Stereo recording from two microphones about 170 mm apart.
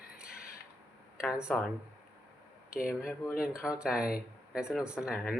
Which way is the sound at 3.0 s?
15° left (ahead or behind).